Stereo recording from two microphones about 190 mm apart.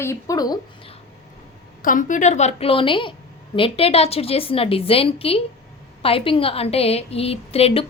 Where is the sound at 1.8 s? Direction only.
45° left (ahead or behind).